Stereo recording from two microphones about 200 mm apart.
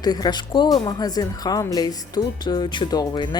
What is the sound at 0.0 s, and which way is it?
Speech, 20° left (ahead or behind).